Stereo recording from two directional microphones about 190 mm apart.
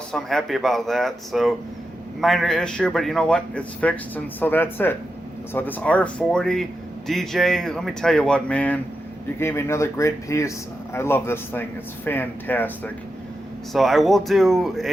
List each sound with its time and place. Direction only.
0.1 s a man's voice: centre (ahead or behind)